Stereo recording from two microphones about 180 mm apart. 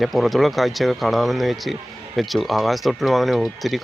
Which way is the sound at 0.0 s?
Centre (ahead or behind).